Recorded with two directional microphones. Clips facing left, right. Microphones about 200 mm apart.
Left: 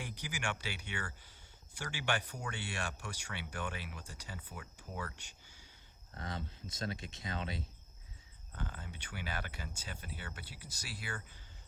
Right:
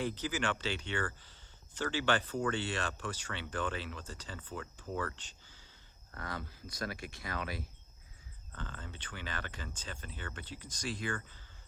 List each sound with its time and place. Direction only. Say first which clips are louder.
0.0 s speech: right 7 dB; 10° left (ahead or behind)
5.1 s a sound: even; 10° left (ahead or behind)
6.1 s speech: right 1 dB; 20° left (ahead or behind)
8.5 s speech: even; 10° left (ahead or behind)